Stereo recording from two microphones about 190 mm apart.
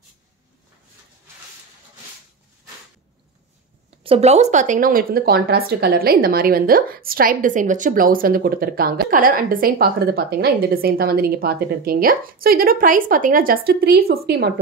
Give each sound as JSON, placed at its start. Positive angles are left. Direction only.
{"t": 4.0, "sound": "speech", "side_deg": -30}